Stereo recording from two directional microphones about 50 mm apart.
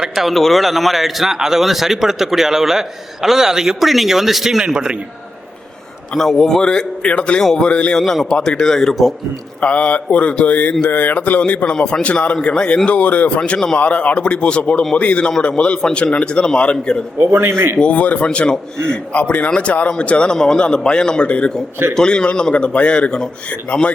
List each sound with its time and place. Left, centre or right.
0.3 s speech: centre
6.1 s a man's voice: centre; by 7.9 s left
7.9 s a man's voice: centre
9.6 s speech: left
11.6 s speech: centre
17.3 s speech: right
17.7 s speech: left
18.3 s speech: centre
19.1 s a man's voice: left